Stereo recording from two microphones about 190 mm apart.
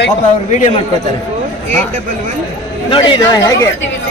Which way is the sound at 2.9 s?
25° left (ahead or behind).